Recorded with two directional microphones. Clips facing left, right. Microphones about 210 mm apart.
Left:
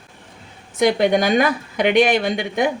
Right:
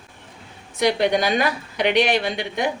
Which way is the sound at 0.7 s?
50° left (ahead or behind).